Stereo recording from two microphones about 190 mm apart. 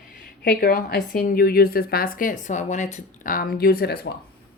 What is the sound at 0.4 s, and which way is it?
A woman's voice, 50° left (ahead or behind).